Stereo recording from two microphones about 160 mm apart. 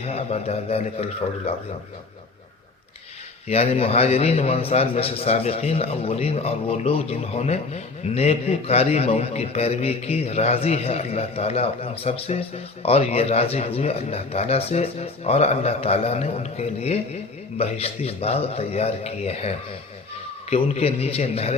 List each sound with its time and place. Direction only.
0.0 s a man's voice: 40° left (ahead or behind)
3.5 s a man's voice: 40° left (ahead or behind)